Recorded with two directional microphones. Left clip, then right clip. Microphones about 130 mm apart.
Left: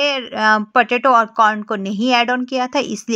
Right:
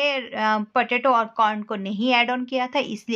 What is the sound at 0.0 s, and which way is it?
Speech, 40° left (ahead or behind).